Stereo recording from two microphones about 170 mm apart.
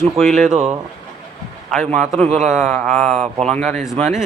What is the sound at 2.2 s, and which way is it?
Speech, 45° right (ahead or behind).